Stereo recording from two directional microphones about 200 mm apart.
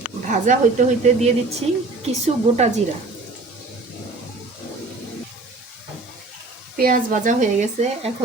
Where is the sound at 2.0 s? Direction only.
35° right (ahead or behind).